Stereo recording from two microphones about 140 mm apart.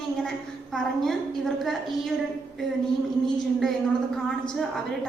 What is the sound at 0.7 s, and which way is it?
Speech, centre (ahead or behind).